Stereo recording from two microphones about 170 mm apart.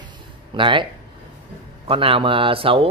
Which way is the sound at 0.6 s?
30° right (ahead or behind).